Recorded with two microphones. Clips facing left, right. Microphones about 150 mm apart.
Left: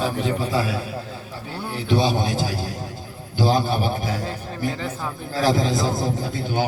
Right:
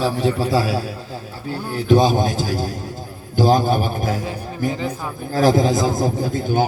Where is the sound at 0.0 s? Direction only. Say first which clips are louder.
Right 4 dB; 35° right (ahead or behind).